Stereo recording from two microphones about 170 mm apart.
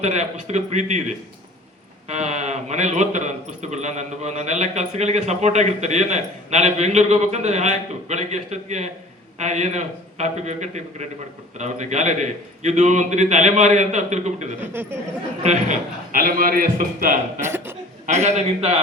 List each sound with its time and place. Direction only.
0.0 s a man's voice: 40° right (ahead or behind)
14.6 s speech: 15° right (ahead or behind)
15.4 s a man's voice: 50° right (ahead or behind)
17.4 s speech: 15° right (ahead or behind)
18.0 s a man's voice: 40° right (ahead or behind)